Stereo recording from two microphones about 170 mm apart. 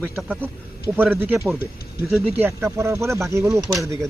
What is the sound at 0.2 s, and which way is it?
Speech, 10° right (ahead or behind).